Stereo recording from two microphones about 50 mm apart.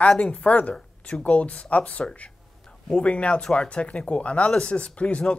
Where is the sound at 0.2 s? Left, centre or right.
Left.